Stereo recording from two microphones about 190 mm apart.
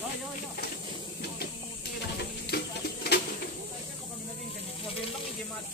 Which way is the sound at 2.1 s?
55° left (ahead or behind).